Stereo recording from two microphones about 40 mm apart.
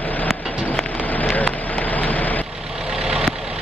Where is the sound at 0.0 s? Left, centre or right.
Left.